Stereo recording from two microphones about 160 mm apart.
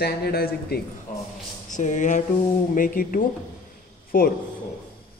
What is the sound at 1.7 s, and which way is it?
A man's voice, 50° left (ahead or behind).